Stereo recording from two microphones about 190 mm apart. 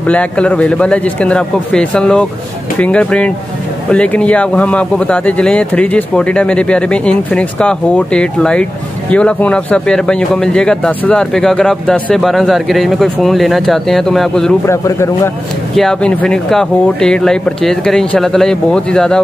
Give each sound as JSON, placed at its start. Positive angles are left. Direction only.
{"t": 0.0, "sound": "a man's voice", "side_deg": 5}
{"t": 14.7, "sound": "a man's voice", "side_deg": 15}
{"t": 15.7, "sound": "speech", "side_deg": 5}